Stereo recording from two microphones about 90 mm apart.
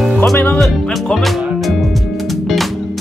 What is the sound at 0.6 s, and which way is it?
Music, centre (ahead or behind).